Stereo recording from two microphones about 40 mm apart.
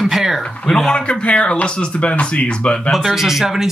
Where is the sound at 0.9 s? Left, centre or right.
Left.